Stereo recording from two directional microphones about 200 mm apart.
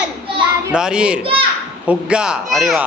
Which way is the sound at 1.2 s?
25° right (ahead or behind).